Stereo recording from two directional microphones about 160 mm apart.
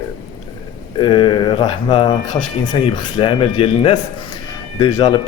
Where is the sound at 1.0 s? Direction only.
30° left (ahead or behind).